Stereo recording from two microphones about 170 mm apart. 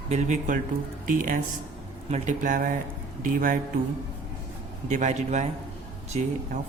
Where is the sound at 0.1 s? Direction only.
45° right (ahead or behind).